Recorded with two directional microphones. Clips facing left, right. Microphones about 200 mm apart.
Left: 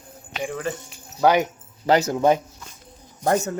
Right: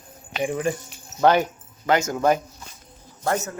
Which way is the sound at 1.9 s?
35° left (ahead or behind).